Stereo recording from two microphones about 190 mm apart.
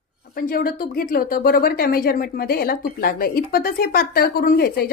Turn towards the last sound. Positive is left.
turn(degrees=55)  # may be behind; listen again after turning